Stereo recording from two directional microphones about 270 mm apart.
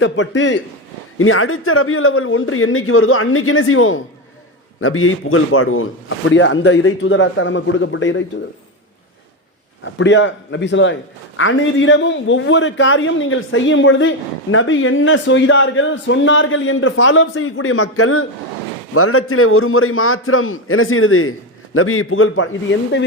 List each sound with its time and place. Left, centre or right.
0.0 s a man's voice: left
9.8 s a man's voice: left